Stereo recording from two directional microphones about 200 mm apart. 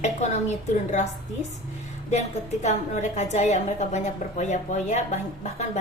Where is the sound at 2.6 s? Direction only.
35° left (ahead or behind).